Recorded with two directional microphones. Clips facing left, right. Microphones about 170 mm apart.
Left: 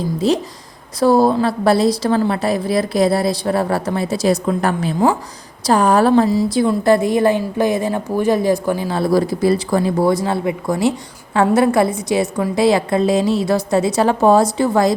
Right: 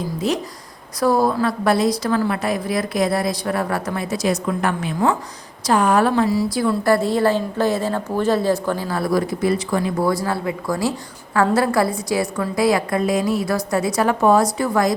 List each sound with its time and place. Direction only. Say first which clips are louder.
0.2 s a woman's voice: left 6 dB; 30° left (ahead or behind)
6.3 s a woman's voice: left 4 dB; 20° left (ahead or behind)